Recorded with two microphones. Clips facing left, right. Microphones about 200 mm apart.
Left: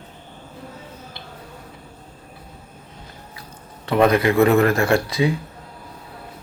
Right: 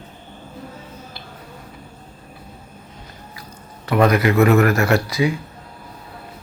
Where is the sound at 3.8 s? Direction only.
25° left (ahead or behind).